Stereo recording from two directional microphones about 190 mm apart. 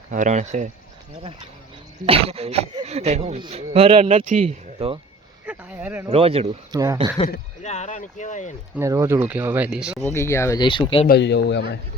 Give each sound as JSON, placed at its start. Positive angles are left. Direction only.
{"t": 0.1, "sound": "speech", "side_deg": -40}
{"t": 2.0, "sound": "speech", "side_deg": -30}
{"t": 5.5, "sound": "speech", "side_deg": -10}
{"t": 6.1, "sound": "speech", "side_deg": -30}
{"t": 6.7, "sound": "speech", "side_deg": -15}
{"t": 7.6, "sound": "speech", "side_deg": 35}
{"t": 8.7, "sound": "speech", "side_deg": -15}
{"t": 10.0, "sound": "speech", "side_deg": 15}
{"t": 11.0, "sound": "a man's voice", "side_deg": 60}